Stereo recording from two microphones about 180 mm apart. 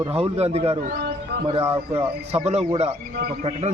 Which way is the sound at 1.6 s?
15° right (ahead or behind).